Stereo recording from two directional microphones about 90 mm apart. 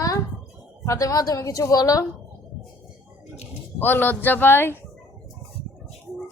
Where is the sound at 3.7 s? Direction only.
20° left (ahead or behind).